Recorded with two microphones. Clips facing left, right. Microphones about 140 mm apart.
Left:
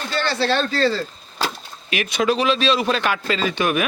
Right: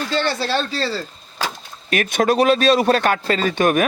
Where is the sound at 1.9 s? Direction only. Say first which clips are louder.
Right 3 dB; 45° right (ahead or behind).